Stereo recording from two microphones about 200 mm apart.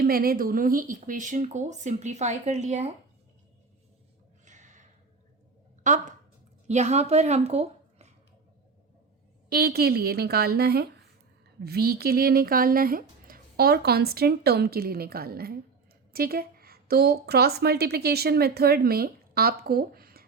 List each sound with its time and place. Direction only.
0.0 s speech: 50° right (ahead or behind)
4.4 s a sound: 40° right (ahead or behind)
5.8 s a woman's voice: 40° right (ahead or behind)
9.5 s a woman's voice: 50° right (ahead or behind)